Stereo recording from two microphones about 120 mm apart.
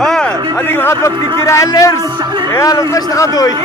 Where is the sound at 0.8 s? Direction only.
25° left (ahead or behind).